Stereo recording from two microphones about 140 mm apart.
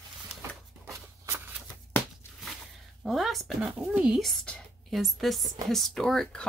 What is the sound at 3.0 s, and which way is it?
Speech, centre (ahead or behind).